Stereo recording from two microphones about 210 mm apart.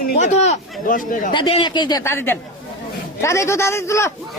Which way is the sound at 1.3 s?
25° left (ahead or behind).